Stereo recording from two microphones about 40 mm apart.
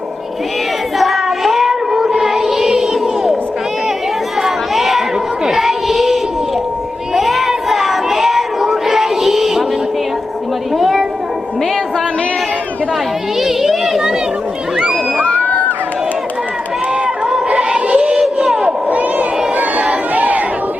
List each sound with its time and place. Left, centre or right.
0.9 s child singing: centre
4.4 s chatter: centre
5.5 s a sound: centre
9.0 s music: centre
10.8 s a sound: centre
13.4 s children playing: centre
15.2 s crowd: left
17.5 s music: right
18.3 s crowd: right
18.9 s a sound: right
19.5 s crowd: right